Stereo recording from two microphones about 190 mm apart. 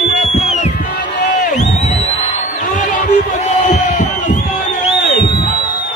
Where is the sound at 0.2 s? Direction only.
35° left (ahead or behind).